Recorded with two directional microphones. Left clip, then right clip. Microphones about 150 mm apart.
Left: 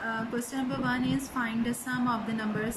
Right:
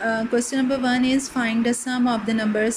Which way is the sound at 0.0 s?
20° right (ahead or behind).